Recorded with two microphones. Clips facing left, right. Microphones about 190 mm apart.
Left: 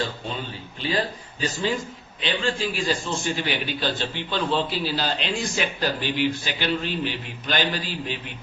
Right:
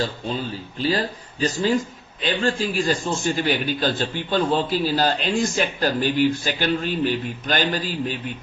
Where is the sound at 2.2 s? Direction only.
45° right (ahead or behind).